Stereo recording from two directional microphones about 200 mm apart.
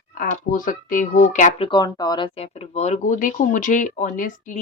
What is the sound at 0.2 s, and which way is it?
Speech, 40° left (ahead or behind).